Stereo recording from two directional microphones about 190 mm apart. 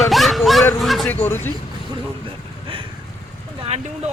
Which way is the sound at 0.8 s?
Centre (ahead or behind).